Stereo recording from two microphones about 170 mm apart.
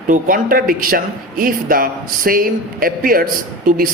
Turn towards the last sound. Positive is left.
turn(degrees=-55)  # may be behind; listen again after turning